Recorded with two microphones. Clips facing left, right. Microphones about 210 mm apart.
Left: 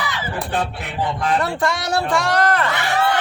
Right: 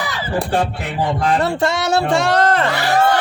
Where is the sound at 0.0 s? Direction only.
35° right (ahead or behind).